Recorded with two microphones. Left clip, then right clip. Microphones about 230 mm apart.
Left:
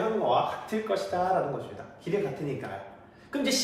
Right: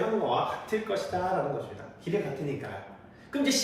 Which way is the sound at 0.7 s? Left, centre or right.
Centre.